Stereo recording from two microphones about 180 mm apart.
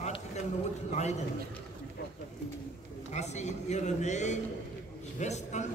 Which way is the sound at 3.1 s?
40° left (ahead or behind).